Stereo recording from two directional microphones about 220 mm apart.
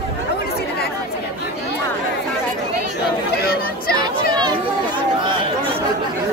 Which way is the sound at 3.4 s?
45° left (ahead or behind).